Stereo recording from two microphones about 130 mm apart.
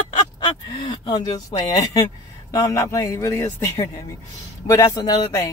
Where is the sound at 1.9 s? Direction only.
25° left (ahead or behind).